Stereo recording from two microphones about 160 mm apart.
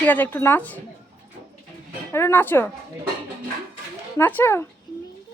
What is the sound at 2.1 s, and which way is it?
Speech, 15° left (ahead or behind).